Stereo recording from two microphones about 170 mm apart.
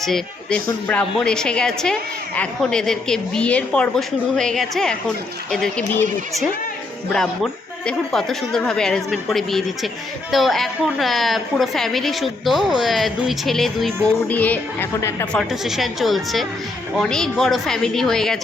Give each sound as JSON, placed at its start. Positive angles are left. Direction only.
{"t": 0.0, "sound": "a woman's voice", "side_deg": 5}
{"t": 7.1, "sound": "a woman's voice", "side_deg": 5}
{"t": 15.4, "sound": "a woman's voice", "side_deg": 0}